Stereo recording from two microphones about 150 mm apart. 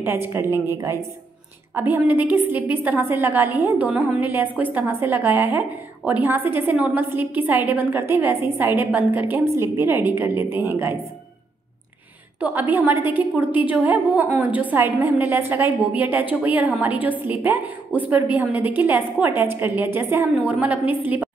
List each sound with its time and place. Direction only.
0.0 s a woman's voice: 15° right (ahead or behind)
1.8 s a woman's voice: 10° right (ahead or behind)
12.4 s a woman's voice: 10° right (ahead or behind)